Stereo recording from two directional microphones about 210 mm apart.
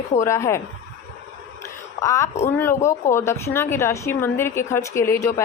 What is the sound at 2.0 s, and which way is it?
Speech, 15° left (ahead or behind).